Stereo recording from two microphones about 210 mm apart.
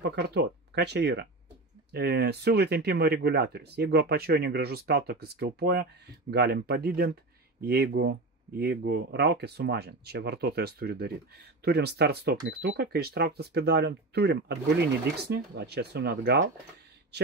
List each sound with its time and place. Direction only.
0.0 s speech: 50° right (ahead or behind)